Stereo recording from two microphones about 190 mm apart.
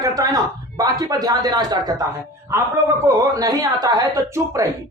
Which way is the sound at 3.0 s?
20° right (ahead or behind).